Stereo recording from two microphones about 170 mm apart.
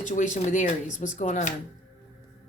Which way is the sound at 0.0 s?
45° left (ahead or behind).